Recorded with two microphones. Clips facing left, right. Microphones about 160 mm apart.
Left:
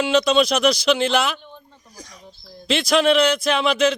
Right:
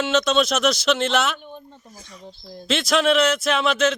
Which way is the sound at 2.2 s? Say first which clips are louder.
Right 4 dB; 30° right (ahead or behind).